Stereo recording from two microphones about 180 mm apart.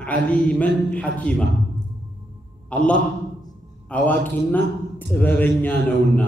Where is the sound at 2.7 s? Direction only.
5° left (ahead or behind).